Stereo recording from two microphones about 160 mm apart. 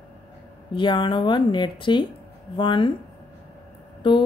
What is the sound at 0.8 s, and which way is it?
Speech, 30° left (ahead or behind).